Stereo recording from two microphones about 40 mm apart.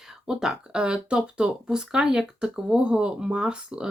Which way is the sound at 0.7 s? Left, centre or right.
Right.